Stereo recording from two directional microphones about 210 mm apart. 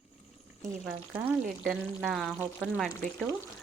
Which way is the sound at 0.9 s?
5° right (ahead or behind).